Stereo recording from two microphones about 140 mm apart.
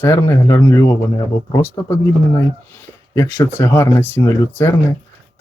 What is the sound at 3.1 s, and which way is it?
Speech, 20° left (ahead or behind).